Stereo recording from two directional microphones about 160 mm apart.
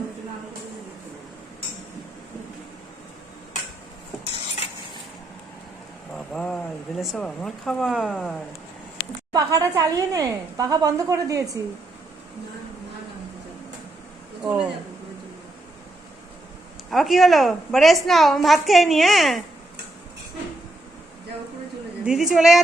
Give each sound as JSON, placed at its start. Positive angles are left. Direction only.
{"t": 6.1, "sound": "speech", "side_deg": 5}
{"t": 9.3, "sound": "a woman's voice", "side_deg": -20}
{"t": 16.9, "sound": "a woman's voice", "side_deg": 0}
{"t": 22.0, "sound": "a woman's voice", "side_deg": -5}